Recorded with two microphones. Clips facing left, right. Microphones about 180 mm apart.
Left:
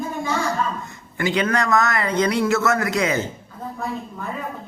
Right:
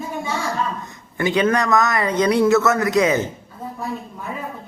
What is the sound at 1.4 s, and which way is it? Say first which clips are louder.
Speech: right 3 dB; 20° right (ahead or behind).